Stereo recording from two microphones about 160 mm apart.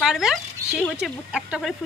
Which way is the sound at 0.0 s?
5° right (ahead or behind).